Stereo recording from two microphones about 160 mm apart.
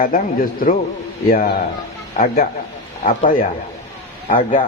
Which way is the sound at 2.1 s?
60° left (ahead or behind).